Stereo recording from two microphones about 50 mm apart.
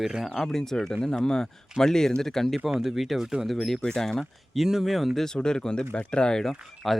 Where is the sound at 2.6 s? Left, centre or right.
Centre.